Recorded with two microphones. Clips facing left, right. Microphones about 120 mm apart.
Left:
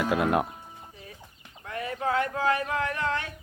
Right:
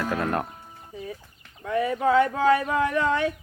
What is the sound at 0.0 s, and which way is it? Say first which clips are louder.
Speech: left 2 dB; 10° left (ahead or behind).